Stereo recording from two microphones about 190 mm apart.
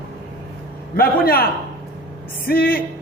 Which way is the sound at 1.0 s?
50° left (ahead or behind).